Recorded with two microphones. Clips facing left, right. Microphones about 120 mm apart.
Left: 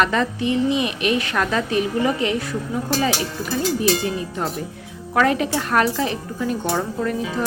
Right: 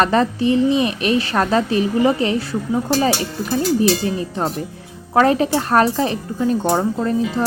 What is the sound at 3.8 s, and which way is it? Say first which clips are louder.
A woman's voice: right 3 dB; 35° right (ahead or behind).